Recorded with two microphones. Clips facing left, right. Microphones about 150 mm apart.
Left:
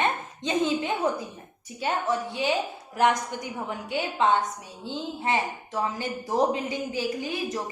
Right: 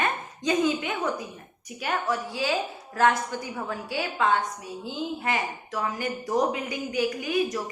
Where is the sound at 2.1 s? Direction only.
20° left (ahead or behind).